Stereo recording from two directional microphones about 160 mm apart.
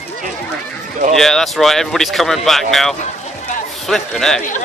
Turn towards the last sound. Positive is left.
turn(degrees=5)  # may be behind; listen again after turning